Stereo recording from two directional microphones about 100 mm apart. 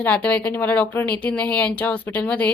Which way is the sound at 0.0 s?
15° left (ahead or behind).